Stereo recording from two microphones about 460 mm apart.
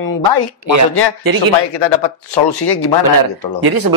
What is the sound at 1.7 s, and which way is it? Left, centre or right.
Speech, left.